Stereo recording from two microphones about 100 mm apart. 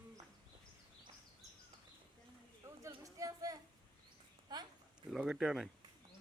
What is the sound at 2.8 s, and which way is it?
Speech, 35° right (ahead or behind).